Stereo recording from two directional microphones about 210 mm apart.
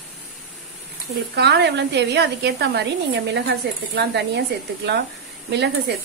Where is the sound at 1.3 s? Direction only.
55° right (ahead or behind).